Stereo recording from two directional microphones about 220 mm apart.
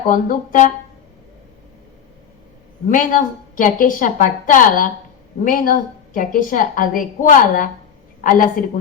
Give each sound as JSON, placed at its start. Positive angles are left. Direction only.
{"t": 0.1, "sound": "a woman's voice", "side_deg": 35}
{"t": 2.9, "sound": "a woman's voice", "side_deg": 40}